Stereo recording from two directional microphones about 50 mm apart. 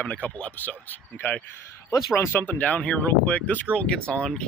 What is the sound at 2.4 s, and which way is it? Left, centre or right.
Speech, left.